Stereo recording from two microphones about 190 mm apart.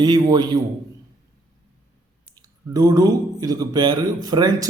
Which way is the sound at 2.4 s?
20° right (ahead or behind).